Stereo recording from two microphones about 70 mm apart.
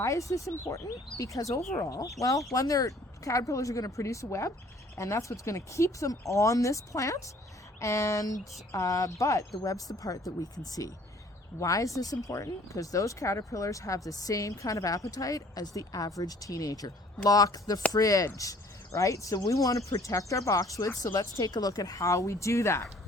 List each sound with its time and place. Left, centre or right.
0.0 s speech: left